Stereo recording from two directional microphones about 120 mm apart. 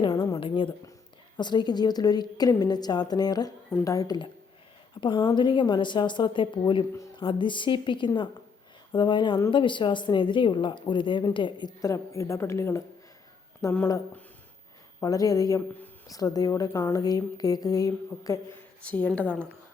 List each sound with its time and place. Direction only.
0.0 s a sound: 45° left (ahead or behind)
0.3 s a woman's voice: 45° left (ahead or behind); by 13.8 s 25° left (ahead or behind)
15.0 s a woman's voice: 30° left (ahead or behind)
18.8 s a woman's voice: 10° left (ahead or behind)